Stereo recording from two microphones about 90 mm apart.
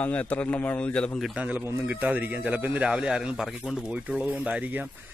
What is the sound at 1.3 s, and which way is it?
Speech, 15° right (ahead or behind).